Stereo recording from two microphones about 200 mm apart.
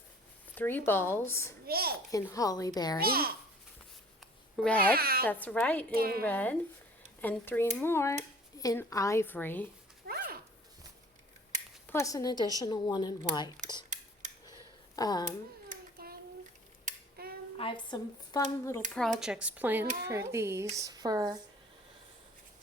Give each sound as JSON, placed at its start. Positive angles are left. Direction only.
{"t": 0.5, "sound": "speech", "side_deg": 10}
{"t": 1.6, "sound": "a child's voice", "side_deg": -50}
{"t": 2.0, "sound": "speech", "side_deg": 15}
{"t": 3.0, "sound": "a child's voice", "side_deg": -50}
{"t": 4.5, "sound": "speech", "side_deg": 5}
{"t": 4.9, "sound": "speech", "side_deg": -50}
{"t": 5.2, "sound": "speech", "side_deg": 10}
{"t": 5.9, "sound": "a child's voice", "side_deg": -50}
{"t": 6.2, "sound": "speech", "side_deg": 10}
{"t": 11.9, "sound": "speech", "side_deg": 15}
{"t": 14.4, "sound": "a sound", "side_deg": 20}
{"t": 15.7, "sound": "a sound", "side_deg": -50}
{"t": 17.6, "sound": "speech", "side_deg": 25}
{"t": 18.9, "sound": "speech", "side_deg": 0}